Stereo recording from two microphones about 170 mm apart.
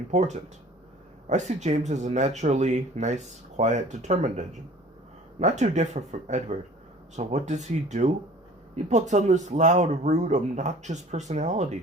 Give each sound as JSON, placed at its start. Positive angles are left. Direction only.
{"t": 0.1, "sound": "speech", "side_deg": -45}